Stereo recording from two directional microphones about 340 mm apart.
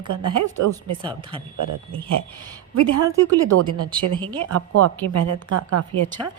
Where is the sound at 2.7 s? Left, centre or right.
Right.